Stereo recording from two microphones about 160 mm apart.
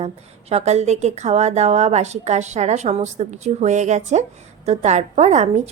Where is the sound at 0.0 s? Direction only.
40° right (ahead or behind).